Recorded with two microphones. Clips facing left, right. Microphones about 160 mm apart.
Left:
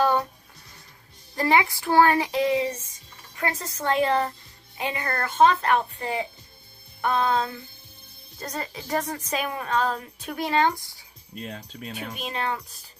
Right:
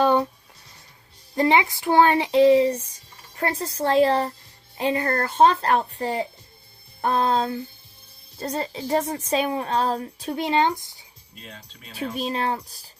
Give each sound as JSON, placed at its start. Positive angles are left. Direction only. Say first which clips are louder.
{"t": 0.0, "sound": "a sound", "louder": "right 3 dB", "side_deg": -20}
{"t": 1.4, "sound": "a woman's voice", "louder": "right 2 dB", "side_deg": -20}
{"t": 11.5, "sound": "speech", "louder": "left 8 dB", "side_deg": 45}
{"t": 11.9, "sound": "speech", "louder": "right 7 dB", "side_deg": -30}